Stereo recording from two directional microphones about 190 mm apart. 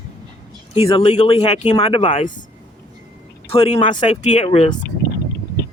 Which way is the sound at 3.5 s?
30° left (ahead or behind).